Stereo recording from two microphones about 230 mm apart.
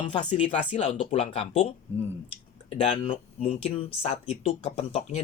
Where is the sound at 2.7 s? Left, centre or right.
Left.